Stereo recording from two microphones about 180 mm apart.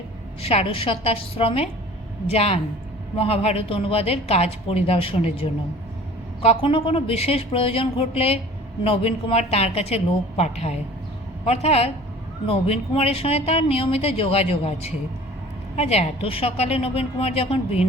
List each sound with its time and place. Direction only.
0.4 s speech: 30° left (ahead or behind)